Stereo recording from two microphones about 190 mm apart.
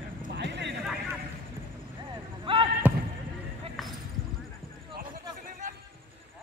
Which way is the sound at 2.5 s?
30° right (ahead or behind).